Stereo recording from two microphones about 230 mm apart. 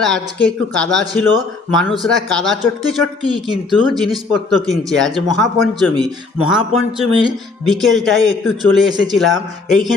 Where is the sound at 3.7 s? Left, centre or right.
Centre.